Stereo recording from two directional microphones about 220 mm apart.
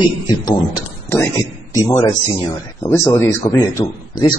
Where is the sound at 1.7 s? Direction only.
15° left (ahead or behind).